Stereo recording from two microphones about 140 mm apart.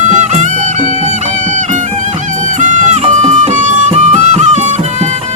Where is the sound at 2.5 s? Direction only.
60° right (ahead or behind).